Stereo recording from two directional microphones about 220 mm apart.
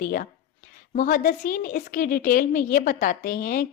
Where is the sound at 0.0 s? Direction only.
40° left (ahead or behind).